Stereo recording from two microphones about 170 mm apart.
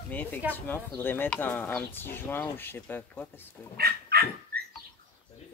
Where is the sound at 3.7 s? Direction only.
65° right (ahead or behind).